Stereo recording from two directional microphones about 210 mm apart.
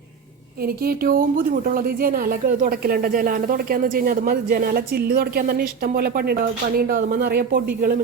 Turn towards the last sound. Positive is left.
turn(degrees=-45)  # may be behind; listen again after turning